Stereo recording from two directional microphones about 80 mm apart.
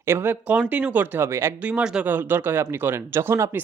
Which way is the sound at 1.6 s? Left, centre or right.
Centre.